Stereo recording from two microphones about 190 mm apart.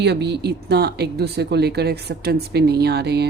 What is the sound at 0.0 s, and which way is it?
Speech, 60° right (ahead or behind).